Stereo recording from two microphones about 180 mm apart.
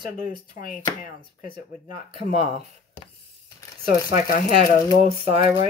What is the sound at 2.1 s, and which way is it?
Speech, 35° right (ahead or behind).